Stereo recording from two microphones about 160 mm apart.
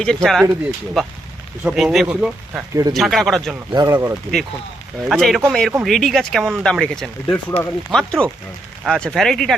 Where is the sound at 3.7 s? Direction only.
25° right (ahead or behind).